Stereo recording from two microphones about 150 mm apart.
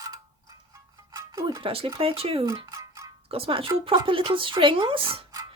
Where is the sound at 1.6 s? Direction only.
35° right (ahead or behind).